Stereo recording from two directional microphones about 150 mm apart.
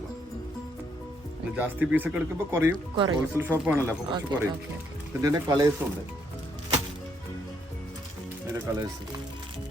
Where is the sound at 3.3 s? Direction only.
15° right (ahead or behind).